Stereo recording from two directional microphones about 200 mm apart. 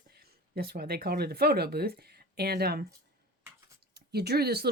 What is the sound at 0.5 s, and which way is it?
Speech, 50° right (ahead or behind).